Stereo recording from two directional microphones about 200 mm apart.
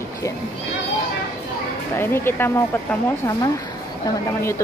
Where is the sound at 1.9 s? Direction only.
10° left (ahead or behind).